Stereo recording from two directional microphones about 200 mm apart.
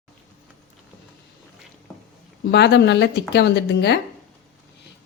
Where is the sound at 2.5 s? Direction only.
55° left (ahead or behind).